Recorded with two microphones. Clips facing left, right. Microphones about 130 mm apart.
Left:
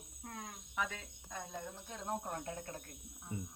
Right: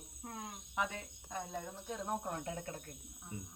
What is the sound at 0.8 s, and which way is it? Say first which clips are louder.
Speech: right 2 dB; 20° right (ahead or behind).